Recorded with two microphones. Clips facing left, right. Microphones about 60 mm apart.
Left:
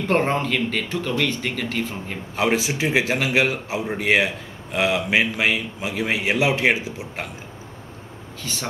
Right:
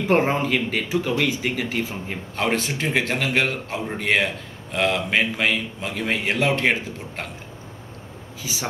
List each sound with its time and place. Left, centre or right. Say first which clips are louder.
0.0 s speech: right 1 dB; centre
2.3 s a man's voice: left 2 dB; centre
8.4 s speech: even; centre